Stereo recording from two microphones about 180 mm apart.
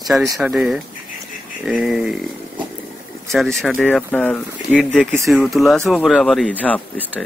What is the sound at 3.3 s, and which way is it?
Speech, centre (ahead or behind).